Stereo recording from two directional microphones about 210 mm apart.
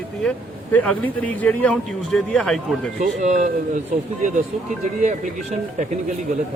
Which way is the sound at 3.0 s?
35° right (ahead or behind).